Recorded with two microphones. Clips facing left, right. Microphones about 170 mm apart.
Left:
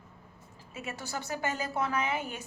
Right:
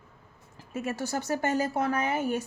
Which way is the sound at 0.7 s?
45° right (ahead or behind).